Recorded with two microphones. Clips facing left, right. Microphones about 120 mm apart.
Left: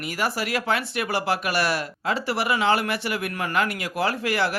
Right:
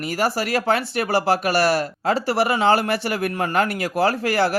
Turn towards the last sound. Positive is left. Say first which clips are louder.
# right 5 dB
turn(degrees=-40)  # may be behind; listen again after turning